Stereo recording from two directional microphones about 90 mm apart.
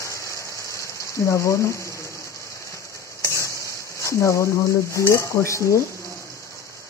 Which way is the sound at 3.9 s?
35° left (ahead or behind).